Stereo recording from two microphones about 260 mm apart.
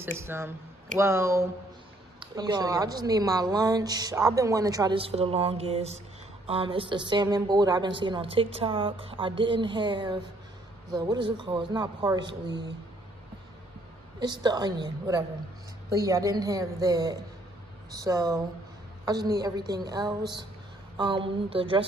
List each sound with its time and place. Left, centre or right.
0.2 s a woman's voice: centre
14.2 s a woman's voice: centre